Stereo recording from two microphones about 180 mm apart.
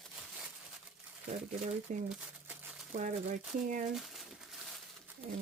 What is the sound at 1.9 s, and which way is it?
Speech, 45° right (ahead or behind).